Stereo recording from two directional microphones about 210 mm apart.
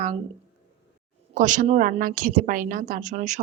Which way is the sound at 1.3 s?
40° right (ahead or behind).